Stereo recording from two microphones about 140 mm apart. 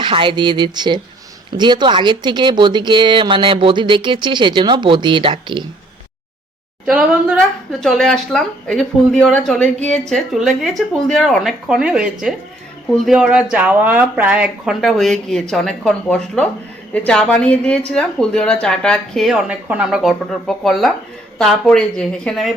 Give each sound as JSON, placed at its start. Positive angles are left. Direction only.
{"t": 0.0, "sound": "speech", "side_deg": -35}
{"t": 6.8, "sound": "a woman's voice", "side_deg": -5}